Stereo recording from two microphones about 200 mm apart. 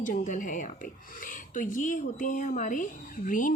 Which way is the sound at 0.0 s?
40° left (ahead or behind).